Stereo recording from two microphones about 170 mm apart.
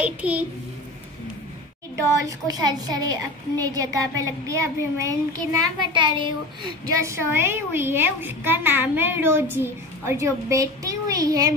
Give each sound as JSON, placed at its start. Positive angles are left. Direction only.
{"t": 0.0, "sound": "a woman's voice", "side_deg": -10}
{"t": 2.2, "sound": "a woman's voice", "side_deg": -25}
{"t": 7.0, "sound": "a woman's voice", "side_deg": -15}